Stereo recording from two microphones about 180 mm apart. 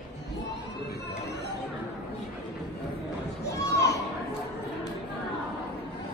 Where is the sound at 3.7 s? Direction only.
70° left (ahead or behind).